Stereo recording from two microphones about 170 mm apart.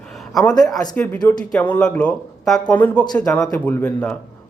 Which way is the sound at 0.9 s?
10° left (ahead or behind).